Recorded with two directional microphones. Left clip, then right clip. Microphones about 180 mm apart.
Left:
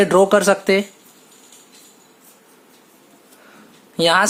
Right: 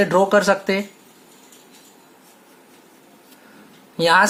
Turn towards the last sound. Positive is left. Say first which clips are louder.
# even
turn(degrees=50)  # may be behind; listen again after turning